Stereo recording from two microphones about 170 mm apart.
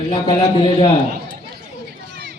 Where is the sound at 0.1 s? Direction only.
30° left (ahead or behind).